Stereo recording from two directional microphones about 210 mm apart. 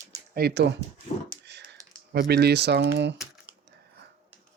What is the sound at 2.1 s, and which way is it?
Speech, 50° right (ahead or behind).